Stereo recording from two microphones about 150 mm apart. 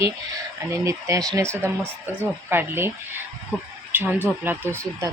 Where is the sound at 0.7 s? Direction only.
20° right (ahead or behind).